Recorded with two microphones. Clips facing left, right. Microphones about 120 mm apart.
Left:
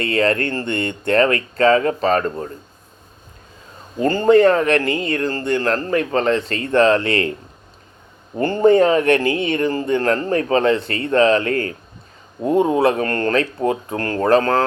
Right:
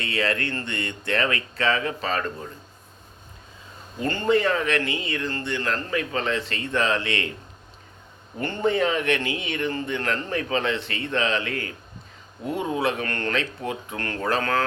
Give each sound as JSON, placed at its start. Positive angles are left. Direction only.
{"t": 0.0, "sound": "speech", "side_deg": 45}
{"t": 4.0, "sound": "speech", "side_deg": 40}
{"t": 8.4, "sound": "speech", "side_deg": 35}